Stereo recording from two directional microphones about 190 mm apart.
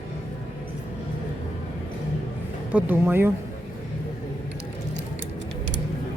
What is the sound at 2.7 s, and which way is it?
Speech, 10° right (ahead or behind).